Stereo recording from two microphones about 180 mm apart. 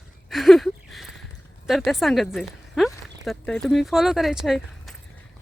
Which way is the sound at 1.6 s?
Centre (ahead or behind).